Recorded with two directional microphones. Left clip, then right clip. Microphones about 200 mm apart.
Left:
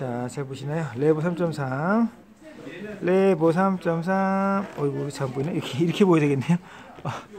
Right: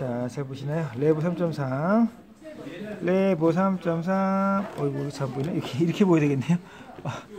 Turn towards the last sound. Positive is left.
turn(degrees=20)  # may be behind; listen again after turning